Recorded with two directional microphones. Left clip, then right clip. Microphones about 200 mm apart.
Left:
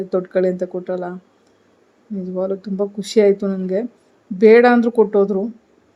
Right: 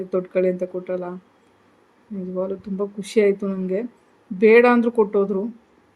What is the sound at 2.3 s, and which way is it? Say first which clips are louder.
Speech: left 4 dB; 15° left (ahead or behind).